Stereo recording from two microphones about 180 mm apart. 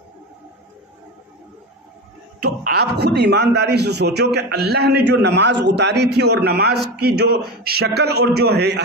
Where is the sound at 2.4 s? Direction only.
65° right (ahead or behind).